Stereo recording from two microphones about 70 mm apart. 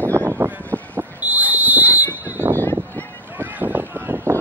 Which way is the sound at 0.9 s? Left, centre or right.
Right.